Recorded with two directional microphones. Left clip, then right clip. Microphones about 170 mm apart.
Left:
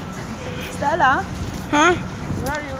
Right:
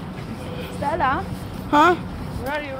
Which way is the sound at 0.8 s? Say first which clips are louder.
Left 5 dB; 40° left (ahead or behind).